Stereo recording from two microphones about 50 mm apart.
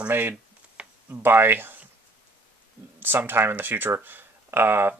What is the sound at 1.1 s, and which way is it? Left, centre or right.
Speech, right.